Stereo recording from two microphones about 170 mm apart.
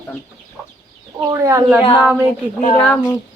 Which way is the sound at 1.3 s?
15° right (ahead or behind).